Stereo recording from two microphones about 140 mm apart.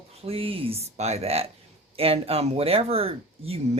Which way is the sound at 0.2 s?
45° right (ahead or behind).